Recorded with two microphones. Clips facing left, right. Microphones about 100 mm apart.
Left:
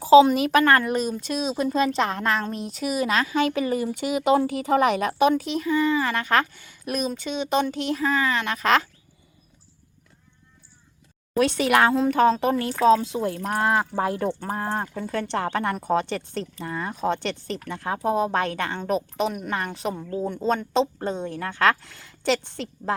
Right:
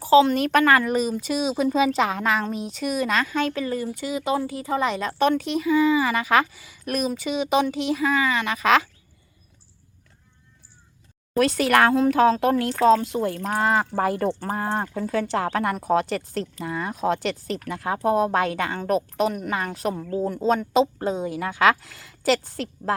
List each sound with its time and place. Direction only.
0.0 s a woman's voice: 15° left (ahead or behind)
0.3 s speech: centre (ahead or behind)
11.3 s speech: centre (ahead or behind)